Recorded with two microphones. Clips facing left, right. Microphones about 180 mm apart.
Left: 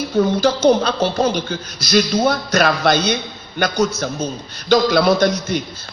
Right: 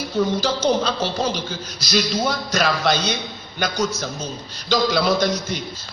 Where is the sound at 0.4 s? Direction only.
55° left (ahead or behind).